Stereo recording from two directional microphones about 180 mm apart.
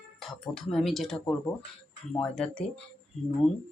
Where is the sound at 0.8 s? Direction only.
Centre (ahead or behind).